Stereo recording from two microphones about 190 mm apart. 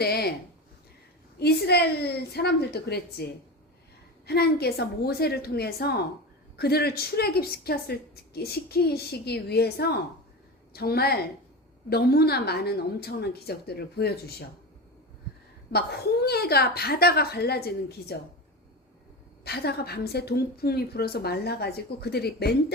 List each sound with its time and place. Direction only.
0.0 s a sound: 55° left (ahead or behind)
1.4 s a woman's voice: 60° left (ahead or behind)
4.3 s a woman's voice: 55° left (ahead or behind)
15.7 s a woman's voice: 55° left (ahead or behind)
19.5 s a woman's voice: 55° left (ahead or behind)